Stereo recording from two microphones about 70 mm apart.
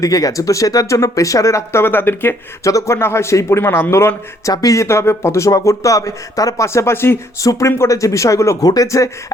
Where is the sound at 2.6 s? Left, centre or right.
Left.